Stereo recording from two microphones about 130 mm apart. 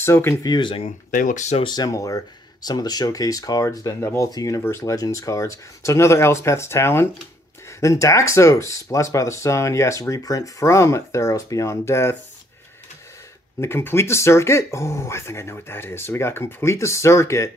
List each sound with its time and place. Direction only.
0.0 s speech: 20° left (ahead or behind)
0.5 s speech: 40° left (ahead or behind)
0.8 s speech: 85° left
1.6 s speech: 30° left (ahead or behind)
13.6 s speech: 20° left (ahead or behind)